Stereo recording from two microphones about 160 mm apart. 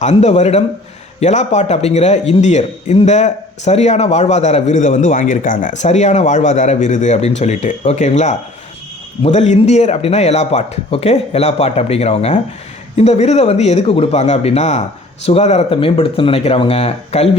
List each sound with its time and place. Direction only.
0.0 s a man's voice: 45° left (ahead or behind)
5.8 s a man's voice: 45° left (ahead or behind)